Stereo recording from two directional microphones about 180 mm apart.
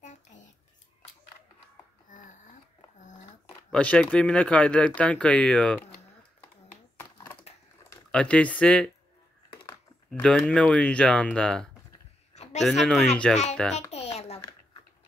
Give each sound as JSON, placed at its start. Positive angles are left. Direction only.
{"t": 0.0, "sound": "a sound", "side_deg": 45}
{"t": 2.0, "sound": "a sound", "side_deg": 45}
{"t": 3.7, "sound": "speech", "side_deg": 5}
{"t": 8.1, "sound": "speech", "side_deg": 5}
{"t": 10.2, "sound": "speech", "side_deg": 5}
{"t": 13.7, "sound": "music", "side_deg": 35}